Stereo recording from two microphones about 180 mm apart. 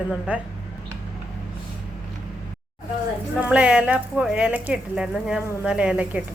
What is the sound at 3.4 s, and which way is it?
A woman's voice, 5° right (ahead or behind).